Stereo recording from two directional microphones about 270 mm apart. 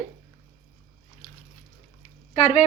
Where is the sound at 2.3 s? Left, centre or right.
Left.